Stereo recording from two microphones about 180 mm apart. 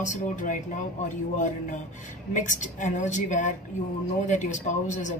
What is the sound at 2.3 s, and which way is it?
Speech, 45° left (ahead or behind).